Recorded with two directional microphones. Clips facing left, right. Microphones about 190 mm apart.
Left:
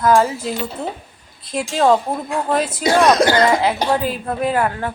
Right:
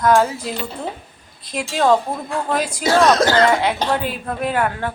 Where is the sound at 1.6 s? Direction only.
Centre (ahead or behind).